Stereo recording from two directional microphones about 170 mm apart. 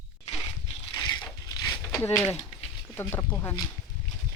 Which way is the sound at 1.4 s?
25° left (ahead or behind).